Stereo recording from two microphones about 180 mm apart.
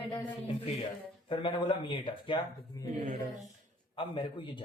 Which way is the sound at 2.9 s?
45° right (ahead or behind).